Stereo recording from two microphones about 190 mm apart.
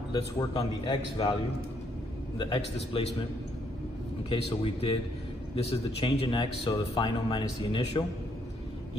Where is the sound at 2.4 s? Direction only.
25° left (ahead or behind).